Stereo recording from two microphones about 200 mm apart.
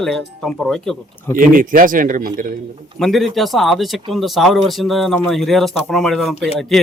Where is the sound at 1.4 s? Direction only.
45° right (ahead or behind).